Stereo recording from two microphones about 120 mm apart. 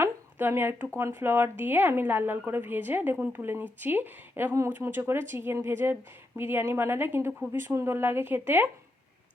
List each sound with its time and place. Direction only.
0.0 s a woman's voice: 20° right (ahead or behind)